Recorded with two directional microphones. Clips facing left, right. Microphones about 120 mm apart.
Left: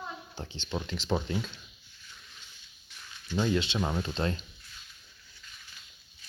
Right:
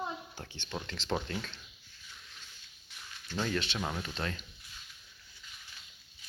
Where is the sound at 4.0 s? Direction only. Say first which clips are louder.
Left 6 dB; 30° left (ahead or behind).